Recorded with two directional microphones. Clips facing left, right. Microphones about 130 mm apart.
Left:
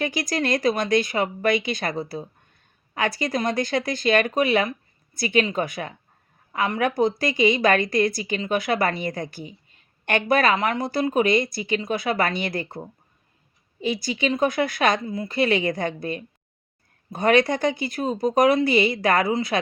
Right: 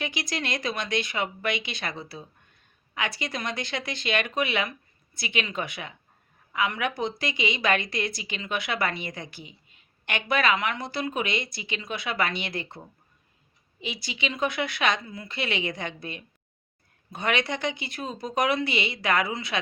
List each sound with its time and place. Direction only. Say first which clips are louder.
0.0 s a woman's voice: left 7 dB; 40° left (ahead or behind)